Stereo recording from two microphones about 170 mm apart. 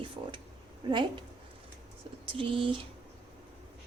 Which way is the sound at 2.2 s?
30° right (ahead or behind).